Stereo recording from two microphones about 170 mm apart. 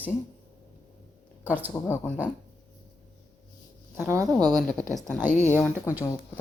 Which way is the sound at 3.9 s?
15° right (ahead or behind).